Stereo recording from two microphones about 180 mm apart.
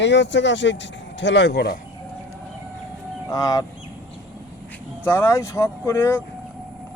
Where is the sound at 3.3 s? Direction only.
20° left (ahead or behind).